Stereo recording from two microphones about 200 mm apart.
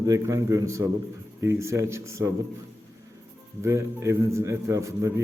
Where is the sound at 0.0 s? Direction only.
15° right (ahead or behind).